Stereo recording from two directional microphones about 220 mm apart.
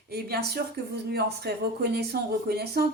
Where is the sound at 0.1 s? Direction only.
45° right (ahead or behind).